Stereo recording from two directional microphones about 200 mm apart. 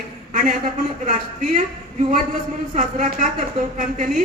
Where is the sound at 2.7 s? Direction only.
40° right (ahead or behind).